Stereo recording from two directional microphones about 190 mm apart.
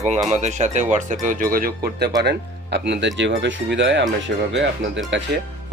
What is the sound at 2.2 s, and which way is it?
Speech, 65° right (ahead or behind).